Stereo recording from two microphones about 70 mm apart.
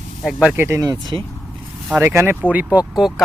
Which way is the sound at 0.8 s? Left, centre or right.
Right.